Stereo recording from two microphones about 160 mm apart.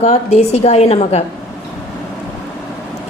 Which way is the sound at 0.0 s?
40° left (ahead or behind).